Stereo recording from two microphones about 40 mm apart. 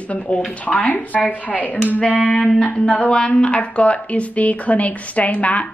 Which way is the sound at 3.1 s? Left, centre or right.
Left.